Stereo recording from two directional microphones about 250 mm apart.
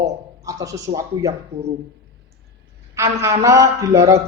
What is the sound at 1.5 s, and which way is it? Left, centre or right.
Speech, right.